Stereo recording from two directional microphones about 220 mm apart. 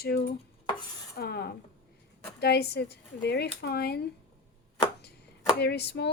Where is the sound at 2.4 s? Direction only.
45° left (ahead or behind).